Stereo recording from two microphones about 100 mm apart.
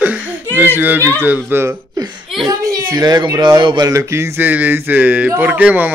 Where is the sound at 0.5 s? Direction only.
20° right (ahead or behind).